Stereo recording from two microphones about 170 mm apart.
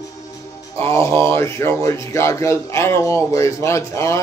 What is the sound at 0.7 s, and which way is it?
Speech, 15° left (ahead or behind).